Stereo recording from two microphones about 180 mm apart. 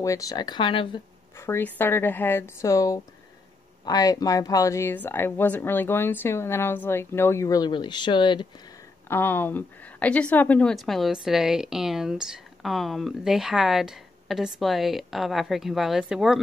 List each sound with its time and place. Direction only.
0.0 s speech: 20° left (ahead or behind)
1.4 s speech: 10° left (ahead or behind)
9.1 s a woman's voice: 10° left (ahead or behind)